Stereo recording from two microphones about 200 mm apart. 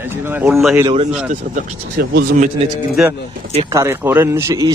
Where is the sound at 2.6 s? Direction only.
30° right (ahead or behind).